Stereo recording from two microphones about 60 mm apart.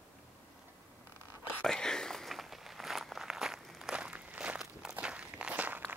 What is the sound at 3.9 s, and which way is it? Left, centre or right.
Walk, centre.